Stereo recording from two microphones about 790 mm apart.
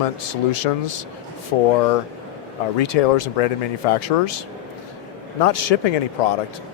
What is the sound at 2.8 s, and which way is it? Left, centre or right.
Speech, left.